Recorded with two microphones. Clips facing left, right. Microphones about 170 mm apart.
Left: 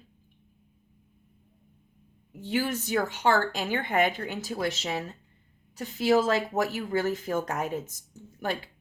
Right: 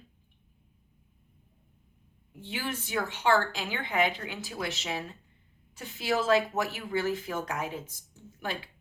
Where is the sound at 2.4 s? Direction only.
45° left (ahead or behind).